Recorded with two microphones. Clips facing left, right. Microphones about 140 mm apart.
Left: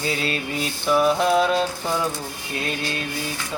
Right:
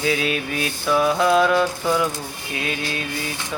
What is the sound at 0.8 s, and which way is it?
Speech, 20° left (ahead or behind).